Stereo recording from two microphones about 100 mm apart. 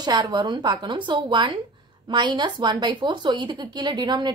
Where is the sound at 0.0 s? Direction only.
45° right (ahead or behind).